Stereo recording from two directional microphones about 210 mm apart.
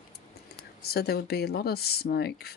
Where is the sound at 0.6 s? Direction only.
50° left (ahead or behind).